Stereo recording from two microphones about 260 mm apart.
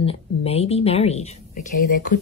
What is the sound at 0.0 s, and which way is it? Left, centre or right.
A woman's voice, left.